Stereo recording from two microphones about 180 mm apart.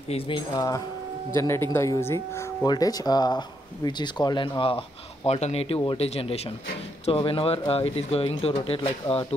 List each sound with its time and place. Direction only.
0.1 s speech: 25° left (ahead or behind)